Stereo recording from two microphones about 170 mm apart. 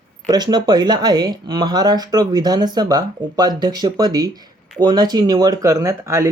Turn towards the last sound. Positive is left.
turn(degrees=-15)  # may be behind; listen again after turning